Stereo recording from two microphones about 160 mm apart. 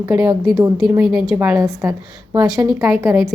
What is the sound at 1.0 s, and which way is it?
Speech, 5° right (ahead or behind).